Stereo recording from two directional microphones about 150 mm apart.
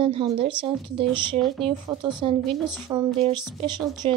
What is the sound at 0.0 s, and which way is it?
A woman's voice, 40° right (ahead or behind).